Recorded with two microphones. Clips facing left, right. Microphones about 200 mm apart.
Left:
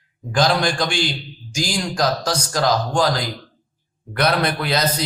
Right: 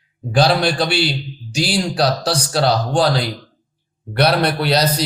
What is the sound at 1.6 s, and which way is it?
Speech, 35° right (ahead or behind).